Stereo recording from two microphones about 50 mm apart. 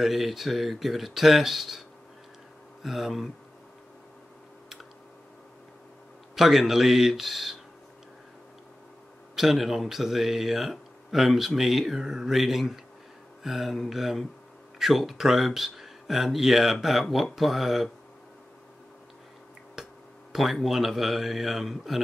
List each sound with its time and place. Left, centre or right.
0.0 s speech: centre
6.3 s speech: centre
9.3 s speech: centre
20.3 s speech: centre